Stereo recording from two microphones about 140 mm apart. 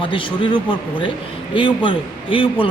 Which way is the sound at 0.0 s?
35° left (ahead or behind).